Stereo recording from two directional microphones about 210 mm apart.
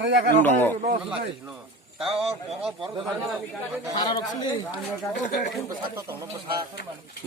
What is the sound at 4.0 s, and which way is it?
Speech, 20° left (ahead or behind).